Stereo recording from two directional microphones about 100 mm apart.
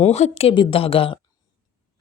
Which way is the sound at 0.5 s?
60° left (ahead or behind).